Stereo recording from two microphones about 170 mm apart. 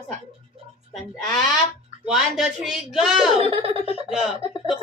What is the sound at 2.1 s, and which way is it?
Speech, 5° right (ahead or behind).